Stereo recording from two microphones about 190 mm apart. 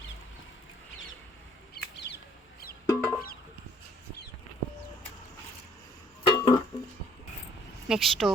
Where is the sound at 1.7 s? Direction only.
60° left (ahead or behind).